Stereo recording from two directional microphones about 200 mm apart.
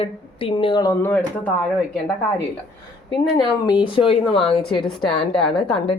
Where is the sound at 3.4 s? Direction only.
20° left (ahead or behind).